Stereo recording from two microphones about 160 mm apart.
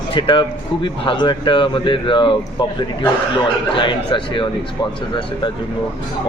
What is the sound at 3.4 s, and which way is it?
Speech, 30° left (ahead or behind).